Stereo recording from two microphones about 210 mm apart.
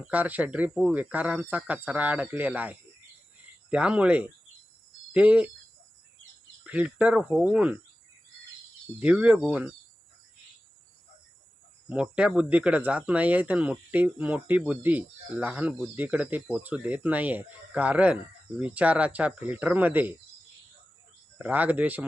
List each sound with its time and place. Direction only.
0.1 s speech: 10° right (ahead or behind)
6.7 s speech: 5° right (ahead or behind)
9.0 s speech: 5° right (ahead or behind)
11.9 s speech: 5° right (ahead or behind)
21.3 s speech: 5° right (ahead or behind)